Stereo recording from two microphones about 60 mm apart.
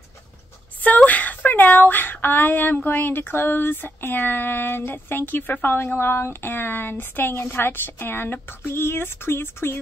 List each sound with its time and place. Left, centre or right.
0.7 s speech: left